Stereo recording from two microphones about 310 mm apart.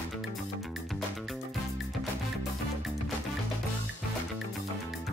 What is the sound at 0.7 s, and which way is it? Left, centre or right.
Music, centre.